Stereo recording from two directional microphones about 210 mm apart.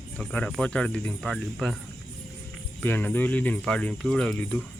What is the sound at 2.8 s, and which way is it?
Speech, 10° left (ahead or behind).